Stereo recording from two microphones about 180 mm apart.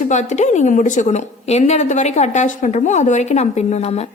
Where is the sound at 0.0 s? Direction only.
40° left (ahead or behind).